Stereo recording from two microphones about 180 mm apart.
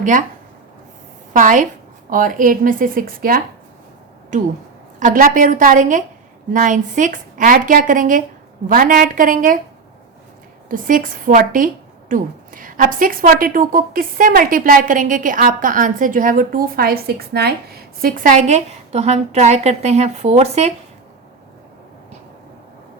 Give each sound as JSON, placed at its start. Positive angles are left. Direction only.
{"t": 0.0, "sound": "speech", "side_deg": -45}
{"t": 1.3, "sound": "speech", "side_deg": -45}
{"t": 4.9, "sound": "speech", "side_deg": -45}
{"t": 10.7, "sound": "speech", "side_deg": -50}